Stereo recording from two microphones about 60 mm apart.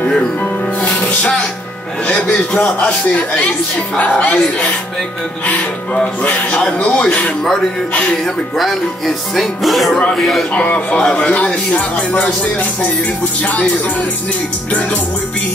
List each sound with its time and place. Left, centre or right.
0.8 s music: centre
2.3 s speech: centre
6.2 s speech: left
8.5 s speech: centre
10.5 s speech: left
13.4 s speech: left